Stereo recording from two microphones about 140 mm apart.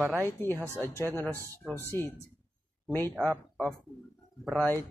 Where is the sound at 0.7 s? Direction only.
15° left (ahead or behind).